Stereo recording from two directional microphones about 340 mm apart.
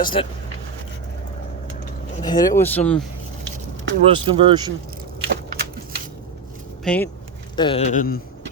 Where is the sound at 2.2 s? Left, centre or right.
Centre.